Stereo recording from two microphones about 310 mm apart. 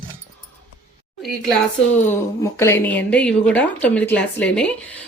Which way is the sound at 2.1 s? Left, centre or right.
Centre.